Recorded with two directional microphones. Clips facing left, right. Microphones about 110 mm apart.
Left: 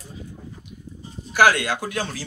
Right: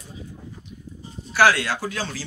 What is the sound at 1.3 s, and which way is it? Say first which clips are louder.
Speech: left 1 dB; 15° left (ahead or behind).